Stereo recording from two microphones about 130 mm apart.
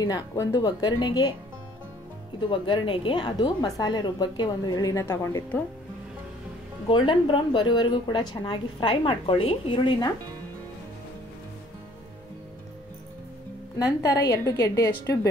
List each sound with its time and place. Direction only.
0.0 s a woman's voice: 25° left (ahead or behind)
2.4 s a woman's voice: 40° left (ahead or behind); by 5.4 s 20° left (ahead or behind)
6.9 s a woman's voice: 40° left (ahead or behind)
14.2 s a woman's voice: 30° left (ahead or behind)